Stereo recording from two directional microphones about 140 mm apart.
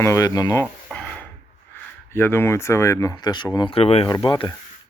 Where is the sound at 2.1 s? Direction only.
15° left (ahead or behind); by 4.0 s 45° left (ahead or behind).